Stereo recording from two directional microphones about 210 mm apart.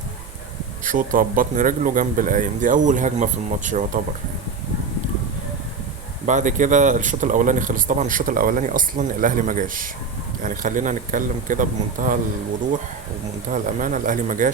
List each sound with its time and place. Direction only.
0.9 s speech: 40° right (ahead or behind)
6.2 s speech: 35° right (ahead or behind)
13.5 s speech: 40° right (ahead or behind)